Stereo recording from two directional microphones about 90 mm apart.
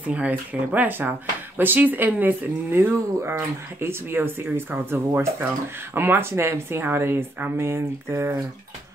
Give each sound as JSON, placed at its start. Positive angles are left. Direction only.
{"t": 0.1, "sound": "speech", "side_deg": -15}